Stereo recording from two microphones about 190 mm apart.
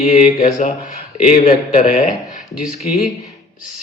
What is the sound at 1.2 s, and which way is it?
Speech, 35° left (ahead or behind).